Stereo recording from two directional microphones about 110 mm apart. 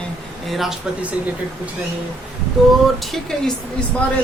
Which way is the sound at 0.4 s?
Centre (ahead or behind).